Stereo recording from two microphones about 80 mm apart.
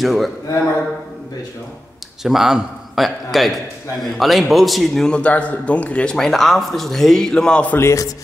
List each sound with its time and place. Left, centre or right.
0.0 s a man's voice: centre
2.2 s a man's voice: centre
7.7 s speech: left